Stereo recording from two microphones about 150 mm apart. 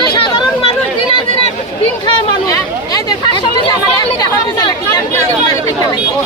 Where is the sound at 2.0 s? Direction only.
25° left (ahead or behind).